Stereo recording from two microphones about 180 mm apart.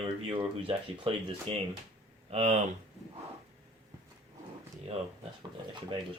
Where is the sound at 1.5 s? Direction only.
30° right (ahead or behind).